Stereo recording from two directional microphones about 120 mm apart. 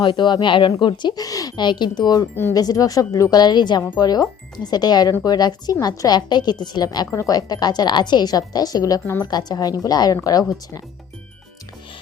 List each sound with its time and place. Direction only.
0.0 s a woman's voice: 40° left (ahead or behind)
2.3 s speech: 20° left (ahead or behind)
2.6 s a woman's voice: 30° left (ahead or behind)
9.2 s a woman's voice: 35° left (ahead or behind)